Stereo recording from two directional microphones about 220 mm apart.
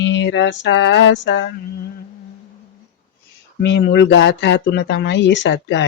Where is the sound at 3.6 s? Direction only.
45° left (ahead or behind).